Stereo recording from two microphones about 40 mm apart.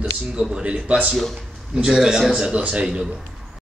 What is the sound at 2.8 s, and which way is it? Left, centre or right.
Speech, centre.